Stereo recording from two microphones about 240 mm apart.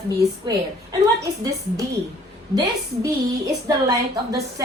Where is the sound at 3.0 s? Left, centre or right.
Centre.